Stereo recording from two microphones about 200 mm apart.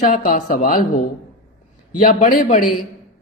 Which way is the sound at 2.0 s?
45° left (ahead or behind).